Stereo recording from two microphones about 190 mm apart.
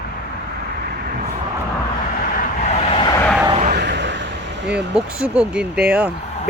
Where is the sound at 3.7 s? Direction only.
60° right (ahead or behind).